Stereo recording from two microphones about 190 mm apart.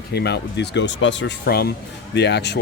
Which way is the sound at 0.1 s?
60° left (ahead or behind).